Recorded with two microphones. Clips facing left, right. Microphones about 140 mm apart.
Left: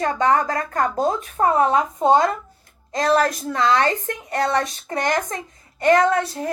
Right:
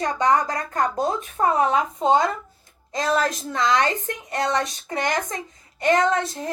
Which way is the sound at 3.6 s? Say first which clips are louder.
Left 2 dB; 30° left (ahead or behind).